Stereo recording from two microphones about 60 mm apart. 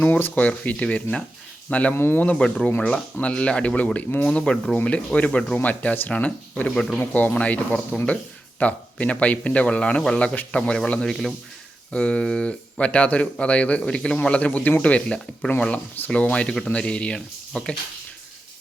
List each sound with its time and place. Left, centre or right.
0.0 s speech: left
2.0 s speech: left
2.3 s speech: centre
4.3 s speech: centre
6.7 s speech: centre
7.0 s speech: left